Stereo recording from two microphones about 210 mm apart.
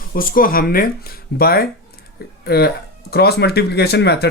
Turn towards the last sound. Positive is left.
turn(degrees=50)  # may be behind; listen again after turning